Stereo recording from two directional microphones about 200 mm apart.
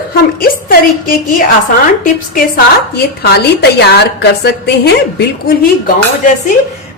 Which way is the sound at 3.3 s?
55° left (ahead or behind).